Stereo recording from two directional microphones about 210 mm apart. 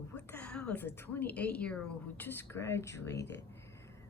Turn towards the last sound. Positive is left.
turn(degrees=55)  # may be behind; listen again after turning